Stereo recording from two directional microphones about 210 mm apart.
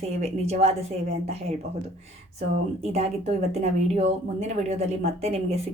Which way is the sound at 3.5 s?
30° right (ahead or behind).